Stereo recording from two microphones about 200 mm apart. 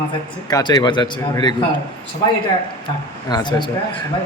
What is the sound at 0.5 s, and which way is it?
A man's voice, 20° left (ahead or behind).